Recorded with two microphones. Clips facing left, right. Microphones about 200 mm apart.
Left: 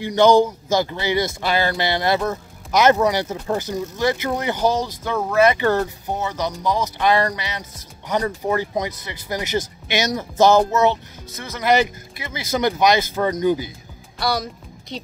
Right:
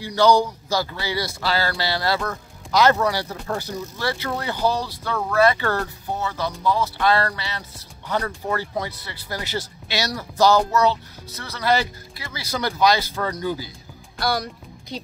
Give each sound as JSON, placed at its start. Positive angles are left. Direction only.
{"t": 0.0, "sound": "speech", "side_deg": 20}
{"t": 14.2, "sound": "music", "side_deg": 0}